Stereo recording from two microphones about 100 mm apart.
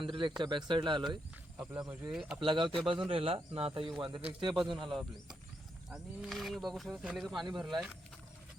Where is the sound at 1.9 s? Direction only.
10° right (ahead or behind).